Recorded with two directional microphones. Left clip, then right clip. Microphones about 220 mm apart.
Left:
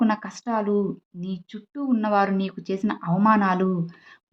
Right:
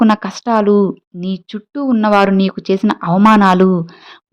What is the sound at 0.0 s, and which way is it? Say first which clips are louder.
A woman's voice: right 11 dB; 40° right (ahead or behind).